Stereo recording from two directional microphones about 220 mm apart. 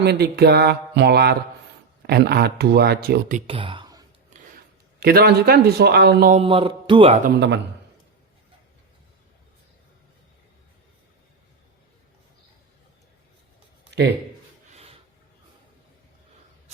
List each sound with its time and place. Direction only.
0.0 s speech: 45° right (ahead or behind)
3.4 s speech: 25° right (ahead or behind)
4.9 s speech: 45° right (ahead or behind)
6.3 s speech: 25° right (ahead or behind)
7.3 s speech: 50° right (ahead or behind)
14.7 s a sound: 30° right (ahead or behind)